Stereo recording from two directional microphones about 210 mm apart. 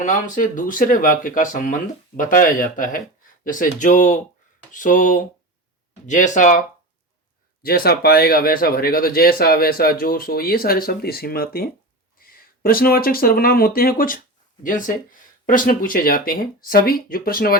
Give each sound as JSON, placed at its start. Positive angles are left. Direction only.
{"t": 0.0, "sound": "speech", "side_deg": 35}
{"t": 7.6, "sound": "speech", "side_deg": 45}